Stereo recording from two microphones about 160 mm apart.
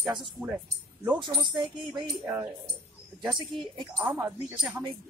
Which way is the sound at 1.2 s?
30° right (ahead or behind).